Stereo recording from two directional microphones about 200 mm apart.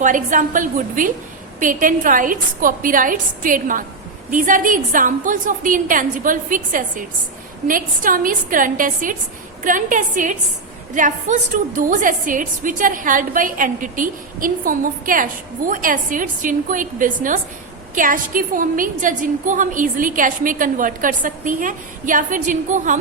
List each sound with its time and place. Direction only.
0.0 s a woman's voice: 40° right (ahead or behind)